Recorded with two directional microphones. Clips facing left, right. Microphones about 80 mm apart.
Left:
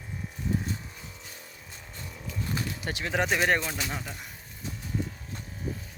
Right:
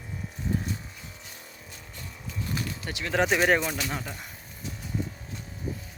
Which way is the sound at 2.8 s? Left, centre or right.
Left.